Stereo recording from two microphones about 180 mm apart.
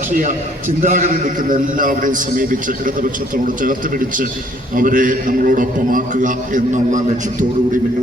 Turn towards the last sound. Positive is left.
turn(degrees=-45)  # may be behind; listen again after turning